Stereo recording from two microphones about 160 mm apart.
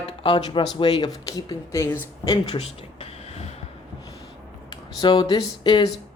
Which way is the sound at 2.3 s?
30° left (ahead or behind).